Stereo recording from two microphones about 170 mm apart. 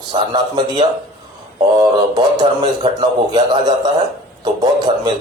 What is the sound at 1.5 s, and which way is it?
A man's voice, 25° right (ahead or behind).